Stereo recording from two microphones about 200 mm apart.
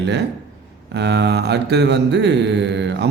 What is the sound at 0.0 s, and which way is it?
Speech, 60° right (ahead or behind).